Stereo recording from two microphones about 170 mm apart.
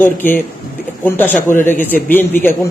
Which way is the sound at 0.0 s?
10° left (ahead or behind).